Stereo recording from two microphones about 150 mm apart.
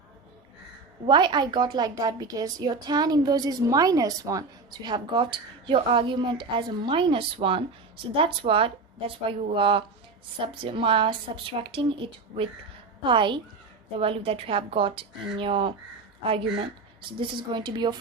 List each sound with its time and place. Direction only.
1.0 s a woman's voice: 30° right (ahead or behind)
13.0 s a woman's voice: 35° right (ahead or behind)